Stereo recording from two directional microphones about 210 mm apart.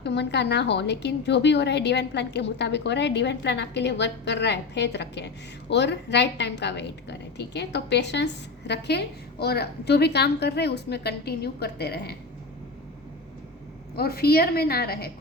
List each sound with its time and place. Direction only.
0.0 s a woman's voice: 55° left (ahead or behind)
13.9 s a woman's voice: 45° left (ahead or behind)